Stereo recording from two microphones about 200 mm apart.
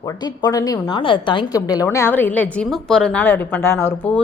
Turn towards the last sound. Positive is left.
turn(degrees=10)  # may be behind; listen again after turning